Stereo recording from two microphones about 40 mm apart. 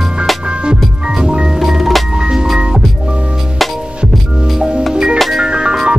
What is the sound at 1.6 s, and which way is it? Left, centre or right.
Music, centre.